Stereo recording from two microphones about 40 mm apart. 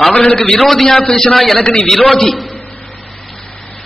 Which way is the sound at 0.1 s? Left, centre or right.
Left.